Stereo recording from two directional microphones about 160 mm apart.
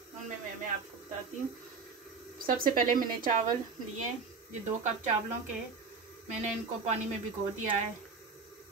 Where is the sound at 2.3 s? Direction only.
60° right (ahead or behind).